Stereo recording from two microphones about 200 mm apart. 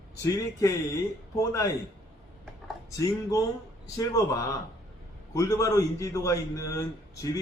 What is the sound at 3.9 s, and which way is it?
A man's voice, 15° left (ahead or behind).